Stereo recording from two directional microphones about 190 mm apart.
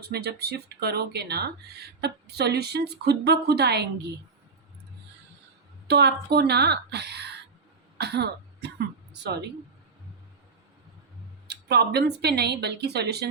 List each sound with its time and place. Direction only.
0.0 s speech: 55° right (ahead or behind)
5.9 s speech: 60° right (ahead or behind)
11.4 s speech: 60° right (ahead or behind)